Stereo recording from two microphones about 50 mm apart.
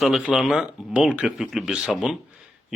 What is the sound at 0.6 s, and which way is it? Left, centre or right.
Speech, centre.